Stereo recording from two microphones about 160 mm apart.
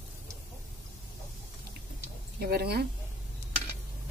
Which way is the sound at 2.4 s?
80° right.